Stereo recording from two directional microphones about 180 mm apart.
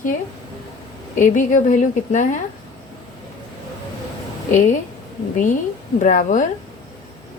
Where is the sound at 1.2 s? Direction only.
45° left (ahead or behind).